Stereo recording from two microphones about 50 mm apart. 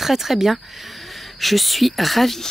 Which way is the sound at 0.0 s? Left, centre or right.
Centre.